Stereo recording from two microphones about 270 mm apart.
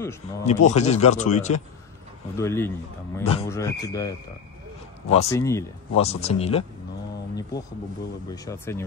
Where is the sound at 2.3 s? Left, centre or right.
Centre.